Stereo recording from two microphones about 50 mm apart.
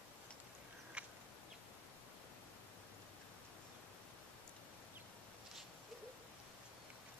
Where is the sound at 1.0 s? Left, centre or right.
Right.